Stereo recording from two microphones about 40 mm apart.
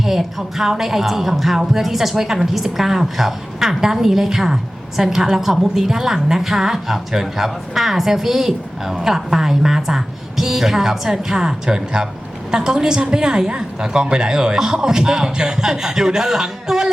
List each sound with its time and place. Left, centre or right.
0.0 s speech: centre